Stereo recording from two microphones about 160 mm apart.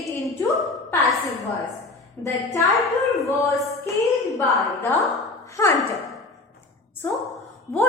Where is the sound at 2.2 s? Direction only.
20° left (ahead or behind).